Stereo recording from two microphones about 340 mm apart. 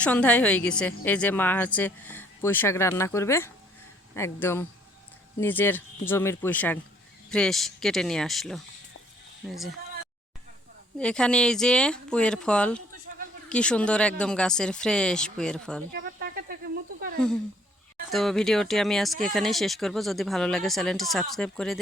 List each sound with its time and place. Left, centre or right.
0.0 s speech: centre
10.9 s speech: centre
15.9 s insect: right
18.1 s speech: centre